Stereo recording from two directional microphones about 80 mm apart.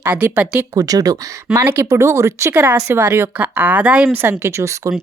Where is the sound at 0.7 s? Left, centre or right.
Right.